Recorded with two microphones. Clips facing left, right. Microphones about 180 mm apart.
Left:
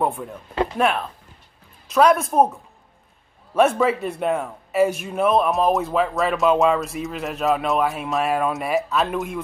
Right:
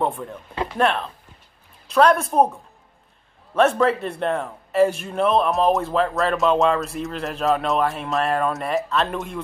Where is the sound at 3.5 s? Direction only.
5° left (ahead or behind).